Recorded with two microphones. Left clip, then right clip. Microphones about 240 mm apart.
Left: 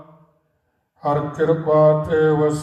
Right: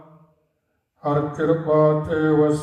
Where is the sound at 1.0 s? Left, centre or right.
Left.